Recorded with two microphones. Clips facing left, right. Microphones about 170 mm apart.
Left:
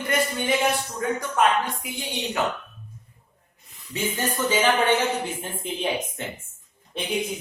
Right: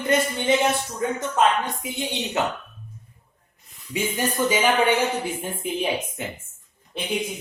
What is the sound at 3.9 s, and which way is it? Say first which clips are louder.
Speech: right 2 dB; 10° right (ahead or behind).